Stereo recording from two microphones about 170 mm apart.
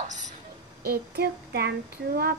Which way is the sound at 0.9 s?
70° right (ahead or behind).